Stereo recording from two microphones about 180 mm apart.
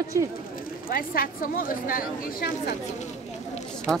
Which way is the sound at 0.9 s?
55° left (ahead or behind).